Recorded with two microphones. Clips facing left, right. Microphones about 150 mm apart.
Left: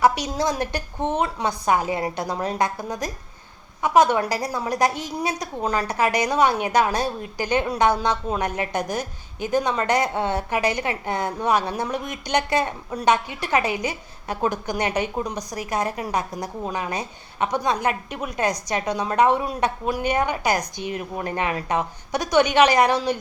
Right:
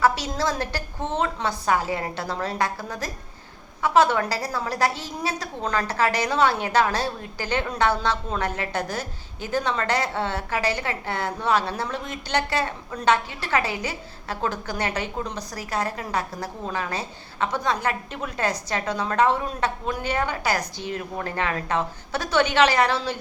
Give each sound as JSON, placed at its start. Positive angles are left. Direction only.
{"t": 0.0, "sound": "a woman's voice", "side_deg": 15}